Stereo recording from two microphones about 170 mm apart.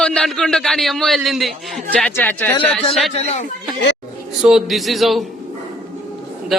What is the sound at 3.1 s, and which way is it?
Speech, 40° left (ahead or behind).